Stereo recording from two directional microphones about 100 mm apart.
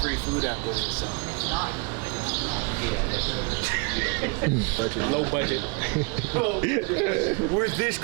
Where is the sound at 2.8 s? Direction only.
20° right (ahead or behind).